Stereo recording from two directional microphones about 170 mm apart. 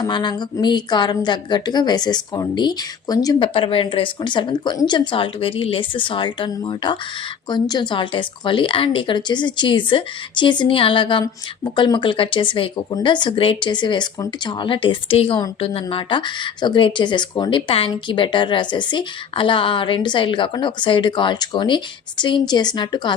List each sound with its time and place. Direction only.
0.0 s speech: 25° left (ahead or behind)